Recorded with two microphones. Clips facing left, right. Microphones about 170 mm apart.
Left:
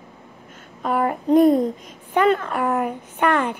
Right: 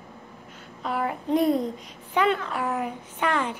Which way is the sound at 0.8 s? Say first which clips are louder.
Left 6 dB; 50° left (ahead or behind).